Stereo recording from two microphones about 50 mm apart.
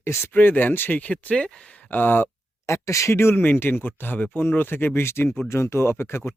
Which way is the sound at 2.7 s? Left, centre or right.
Left.